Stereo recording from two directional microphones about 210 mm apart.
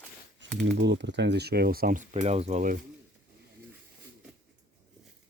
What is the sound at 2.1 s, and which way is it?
Speech, 30° right (ahead or behind).